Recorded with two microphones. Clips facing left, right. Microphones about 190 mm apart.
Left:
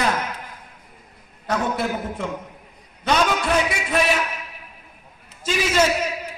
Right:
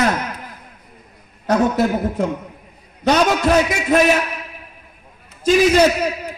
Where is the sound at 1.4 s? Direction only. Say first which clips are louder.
Right 7 dB; 40° right (ahead or behind).